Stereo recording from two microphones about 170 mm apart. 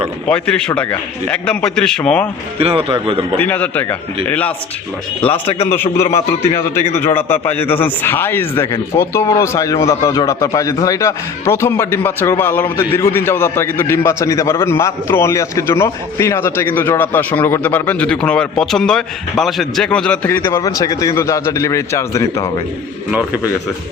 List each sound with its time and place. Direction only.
0.3 s a man's voice: 5° left (ahead or behind)
2.6 s speech: 35° right (ahead or behind)
3.3 s a man's voice: 10° left (ahead or behind)
5.5 s a man's voice: 35° left (ahead or behind)
6.9 s a man's voice: 10° left (ahead or behind)